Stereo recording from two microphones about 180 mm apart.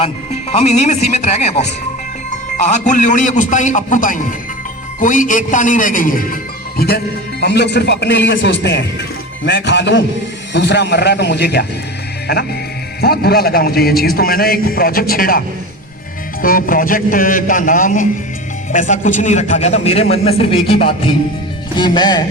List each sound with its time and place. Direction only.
0.5 s a man's voice: 40° left (ahead or behind)
2.6 s a man's voice: 40° left (ahead or behind); by 7.0 s 60° left (ahead or behind)
7.4 s a man's voice: 70° left (ahead or behind)
13.0 s a man's voice: 60° left (ahead or behind); by 22.2 s 25° left (ahead or behind)